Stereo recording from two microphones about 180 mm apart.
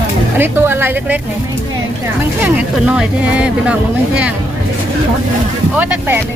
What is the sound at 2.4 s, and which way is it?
Speech, 5° right (ahead or behind).